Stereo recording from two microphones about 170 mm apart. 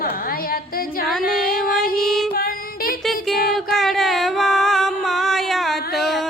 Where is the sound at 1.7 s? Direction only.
Centre (ahead or behind).